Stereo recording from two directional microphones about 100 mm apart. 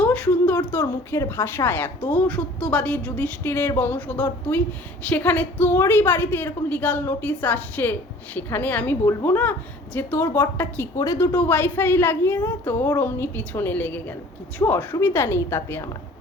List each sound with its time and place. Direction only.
0.0 s a woman's voice: 15° left (ahead or behind)
10.9 s speech: 35° left (ahead or behind)
11.3 s a woman's voice: 20° left (ahead or behind)
14.6 s a woman's voice: 35° left (ahead or behind)